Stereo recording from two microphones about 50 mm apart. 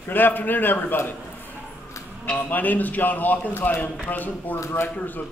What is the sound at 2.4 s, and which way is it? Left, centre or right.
A man's voice, left.